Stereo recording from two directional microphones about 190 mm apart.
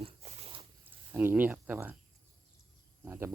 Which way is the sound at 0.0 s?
35° right (ahead or behind).